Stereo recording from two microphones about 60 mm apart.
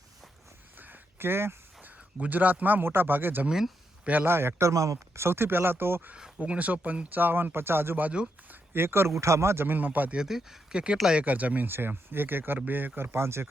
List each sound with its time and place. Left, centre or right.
0.8 s a sound: right
1.8 s a man's voice: right
4.3 s a man's voice: right
4.7 s speech: right
5.2 s a man's voice: right
6.4 s a man's voice: right
10.2 s speech: centre; by 11.7 s right
11.7 s a man's voice: right
13.0 s speech: right